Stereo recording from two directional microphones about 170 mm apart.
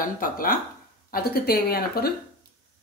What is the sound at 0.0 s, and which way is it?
Speech, 55° left (ahead or behind).